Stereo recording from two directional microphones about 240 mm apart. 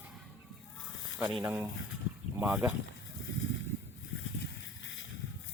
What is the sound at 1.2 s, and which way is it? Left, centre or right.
Speech, centre.